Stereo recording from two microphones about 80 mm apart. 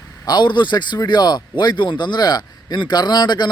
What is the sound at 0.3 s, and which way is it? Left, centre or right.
A man's voice, left.